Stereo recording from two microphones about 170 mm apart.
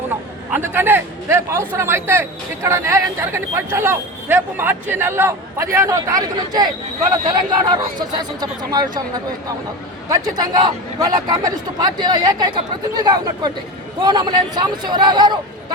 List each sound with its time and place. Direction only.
0.5 s speech: 10° right (ahead or behind)
10.1 s speech: 25° right (ahead or behind)